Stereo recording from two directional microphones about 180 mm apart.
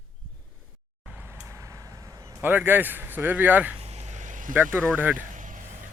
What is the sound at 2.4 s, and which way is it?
Speech, 10° right (ahead or behind).